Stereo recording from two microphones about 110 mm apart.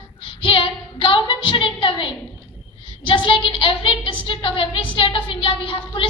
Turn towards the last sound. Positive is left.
turn(degrees=55)  # may be behind; listen again after turning